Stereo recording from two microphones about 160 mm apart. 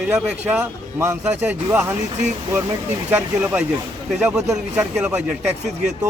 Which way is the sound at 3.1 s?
10° right (ahead or behind).